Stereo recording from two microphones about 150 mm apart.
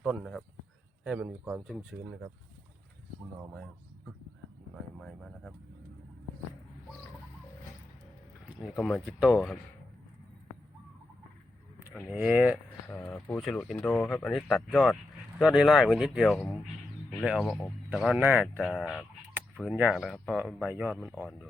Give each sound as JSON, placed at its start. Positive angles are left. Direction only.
{"t": 0.0, "sound": "speech", "side_deg": -5}
{"t": 4.7, "sound": "speech", "side_deg": 0}
{"t": 8.6, "sound": "speech", "side_deg": 0}
{"t": 12.1, "sound": "speech", "side_deg": -10}
{"t": 12.9, "sound": "speech", "side_deg": 15}
{"t": 13.3, "sound": "speech", "side_deg": 0}
{"t": 18.2, "sound": "speech", "side_deg": -10}
{"t": 18.5, "sound": "speech", "side_deg": 5}
{"t": 19.5, "sound": "speech", "side_deg": -10}